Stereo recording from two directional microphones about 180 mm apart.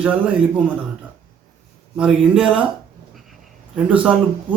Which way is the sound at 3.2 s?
Centre (ahead or behind).